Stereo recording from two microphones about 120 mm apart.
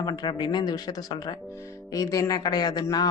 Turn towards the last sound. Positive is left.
turn(degrees=35)  # may be behind; listen again after turning